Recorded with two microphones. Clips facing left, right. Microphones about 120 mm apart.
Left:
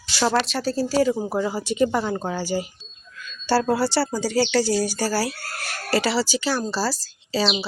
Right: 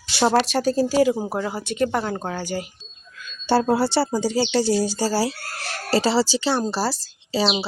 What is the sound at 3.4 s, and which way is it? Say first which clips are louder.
Speech: right 1 dB; 25° right (ahead or behind).